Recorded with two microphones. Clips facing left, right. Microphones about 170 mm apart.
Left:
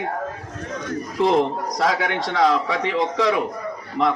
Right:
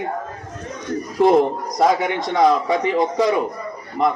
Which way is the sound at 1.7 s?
80° left.